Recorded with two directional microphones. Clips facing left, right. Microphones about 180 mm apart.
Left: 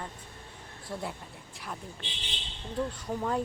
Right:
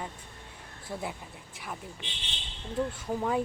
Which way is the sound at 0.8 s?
Centre (ahead or behind).